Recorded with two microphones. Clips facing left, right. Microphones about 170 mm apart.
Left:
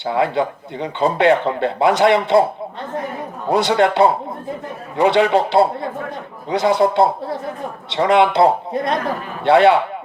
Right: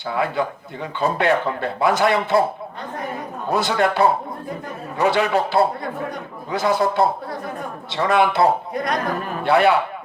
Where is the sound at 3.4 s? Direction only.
20° left (ahead or behind).